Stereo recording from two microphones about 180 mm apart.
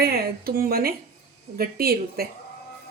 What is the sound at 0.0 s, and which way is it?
A woman's voice, 55° right (ahead or behind).